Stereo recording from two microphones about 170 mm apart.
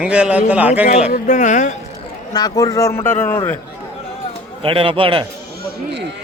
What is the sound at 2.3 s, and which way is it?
A man's voice, 25° left (ahead or behind).